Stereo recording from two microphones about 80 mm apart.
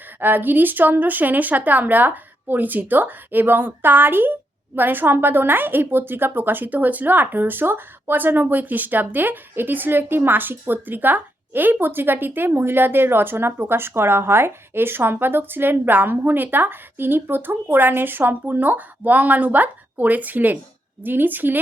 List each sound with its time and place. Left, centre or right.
0.2 s a woman's voice: right